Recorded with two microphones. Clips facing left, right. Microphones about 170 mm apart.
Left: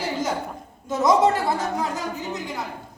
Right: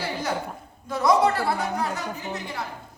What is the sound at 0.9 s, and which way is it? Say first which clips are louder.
Speech: left 2 dB; 20° left (ahead or behind).